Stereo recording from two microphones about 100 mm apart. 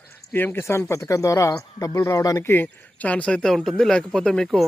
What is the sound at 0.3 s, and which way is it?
Speech, 20° left (ahead or behind).